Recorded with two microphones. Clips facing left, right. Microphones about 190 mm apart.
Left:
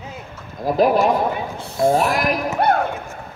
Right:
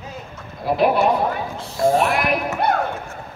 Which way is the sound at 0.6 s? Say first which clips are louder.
Left 2 dB; 40° left (ahead or behind).